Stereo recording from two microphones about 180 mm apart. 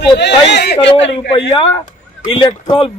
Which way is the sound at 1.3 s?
30° left (ahead or behind).